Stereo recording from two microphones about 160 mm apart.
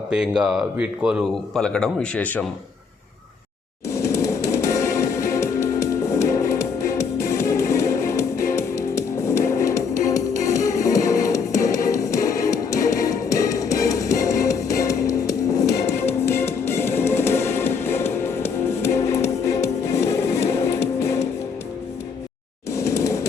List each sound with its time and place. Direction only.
0.1 s speech: 5° right (ahead or behind)
3.8 s music: 20° left (ahead or behind)
22.7 s a sound: 20° left (ahead or behind)